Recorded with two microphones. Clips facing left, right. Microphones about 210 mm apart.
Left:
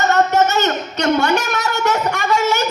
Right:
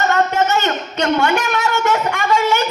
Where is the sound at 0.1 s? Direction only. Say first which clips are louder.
Left 1 dB; 40° left (ahead or behind).